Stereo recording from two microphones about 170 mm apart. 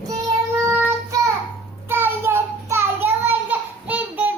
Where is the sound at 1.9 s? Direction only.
15° right (ahead or behind).